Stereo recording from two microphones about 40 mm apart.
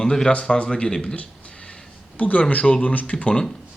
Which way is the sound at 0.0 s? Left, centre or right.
Centre.